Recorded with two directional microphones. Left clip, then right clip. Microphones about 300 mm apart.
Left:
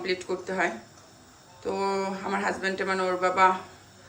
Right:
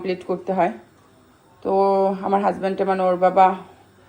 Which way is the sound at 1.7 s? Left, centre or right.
Centre.